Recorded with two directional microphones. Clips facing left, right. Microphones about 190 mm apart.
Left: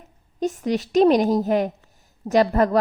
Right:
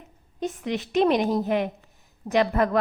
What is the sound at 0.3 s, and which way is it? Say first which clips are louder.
A woman's voice: left 5 dB; 40° left (ahead or behind).